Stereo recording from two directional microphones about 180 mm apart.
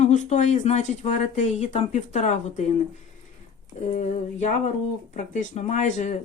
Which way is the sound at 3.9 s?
40° left (ahead or behind).